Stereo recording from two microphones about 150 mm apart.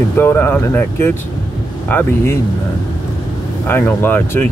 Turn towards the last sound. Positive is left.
turn(degrees=15)  # may be behind; listen again after turning